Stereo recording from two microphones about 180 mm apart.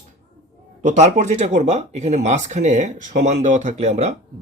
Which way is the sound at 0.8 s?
40° right (ahead or behind).